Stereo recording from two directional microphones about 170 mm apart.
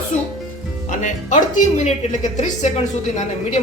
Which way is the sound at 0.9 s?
45° left (ahead or behind).